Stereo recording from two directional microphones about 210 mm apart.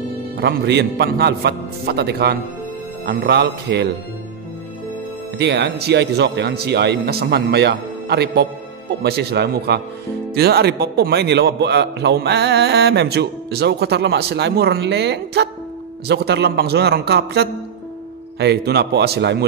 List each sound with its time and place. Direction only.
0.4 s a man's voice: 50° right (ahead or behind)
5.4 s a man's voice: 55° right (ahead or behind)